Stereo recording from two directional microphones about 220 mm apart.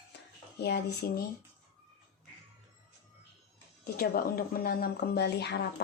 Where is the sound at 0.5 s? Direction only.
45° left (ahead or behind).